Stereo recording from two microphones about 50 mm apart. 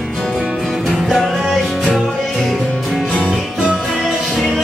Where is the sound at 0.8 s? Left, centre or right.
Centre.